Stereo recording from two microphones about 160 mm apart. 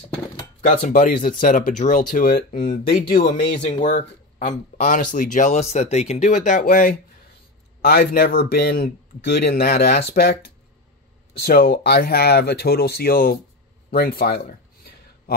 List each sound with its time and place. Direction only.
0.6 s speech: 55° left (ahead or behind)
3.6 s speech: 50° left (ahead or behind); by 10.3 s 75° left (ahead or behind)
11.3 s speech: 70° left (ahead or behind)
13.8 s a sound: 65° left (ahead or behind)